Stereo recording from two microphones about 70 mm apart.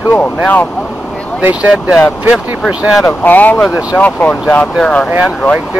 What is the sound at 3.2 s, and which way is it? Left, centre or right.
Speech, left.